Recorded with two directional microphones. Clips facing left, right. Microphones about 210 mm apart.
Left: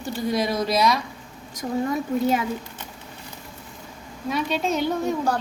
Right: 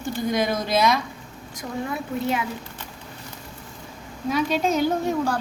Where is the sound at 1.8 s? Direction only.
45° left (ahead or behind).